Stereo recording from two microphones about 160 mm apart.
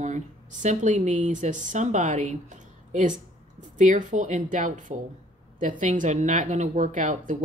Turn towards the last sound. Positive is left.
turn(degrees=-50)  # may be behind; listen again after turning